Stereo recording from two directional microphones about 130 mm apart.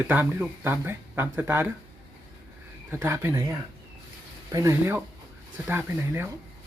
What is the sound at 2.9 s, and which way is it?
Speech, 20° right (ahead or behind).